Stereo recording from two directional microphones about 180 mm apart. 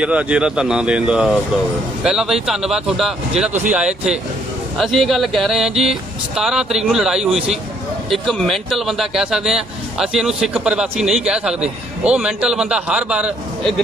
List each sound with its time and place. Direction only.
0.0 s a man's voice: 5° right (ahead or behind)